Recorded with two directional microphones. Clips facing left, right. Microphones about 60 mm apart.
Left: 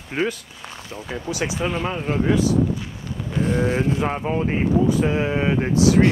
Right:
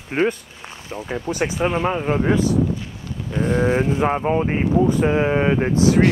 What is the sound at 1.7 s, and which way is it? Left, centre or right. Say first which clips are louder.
Speech: right 4 dB; centre.